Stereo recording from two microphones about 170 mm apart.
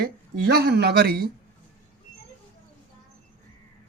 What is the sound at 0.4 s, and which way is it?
Speech, 70° right (ahead or behind).